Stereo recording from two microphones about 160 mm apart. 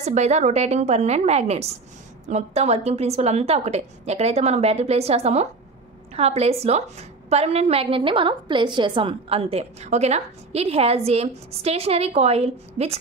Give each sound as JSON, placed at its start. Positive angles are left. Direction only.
{"t": 0.0, "sound": "a woman's voice", "side_deg": -45}